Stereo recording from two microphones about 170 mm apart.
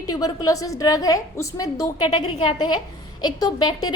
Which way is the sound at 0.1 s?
20° left (ahead or behind).